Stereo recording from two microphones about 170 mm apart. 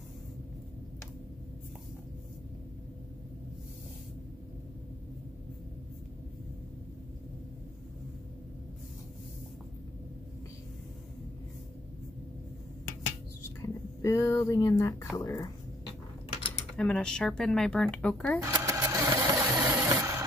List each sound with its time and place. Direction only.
13.6 s speech: 15° left (ahead or behind)
16.7 s speech: 5° left (ahead or behind)
18.4 s sewing machine: 20° right (ahead or behind)